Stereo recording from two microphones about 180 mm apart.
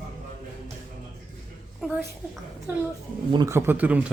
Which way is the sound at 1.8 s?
Centre (ahead or behind).